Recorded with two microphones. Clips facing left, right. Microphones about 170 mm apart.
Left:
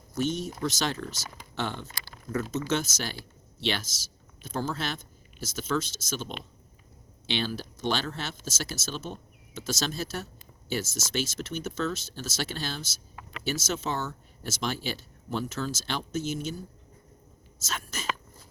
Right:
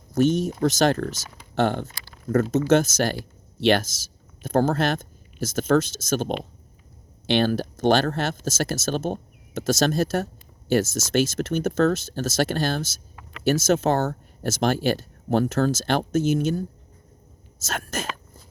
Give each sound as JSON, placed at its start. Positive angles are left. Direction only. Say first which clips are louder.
{"t": 0.1, "sound": "speech", "louder": "right 9 dB", "side_deg": -50}